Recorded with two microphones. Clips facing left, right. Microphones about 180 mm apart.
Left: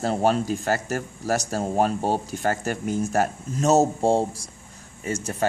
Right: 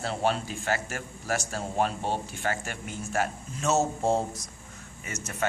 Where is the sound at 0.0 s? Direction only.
45° left (ahead or behind).